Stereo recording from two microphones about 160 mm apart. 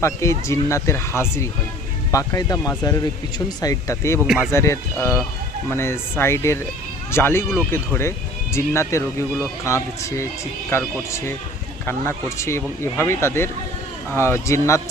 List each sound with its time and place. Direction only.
0.0 s speech: 20° left (ahead or behind)